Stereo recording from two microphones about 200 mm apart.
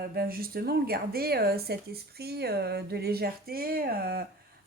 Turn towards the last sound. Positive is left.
turn(degrees=-50)  # may be behind; listen again after turning